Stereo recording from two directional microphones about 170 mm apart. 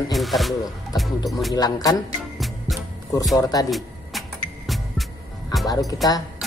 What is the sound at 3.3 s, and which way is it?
Speech, 20° left (ahead or behind).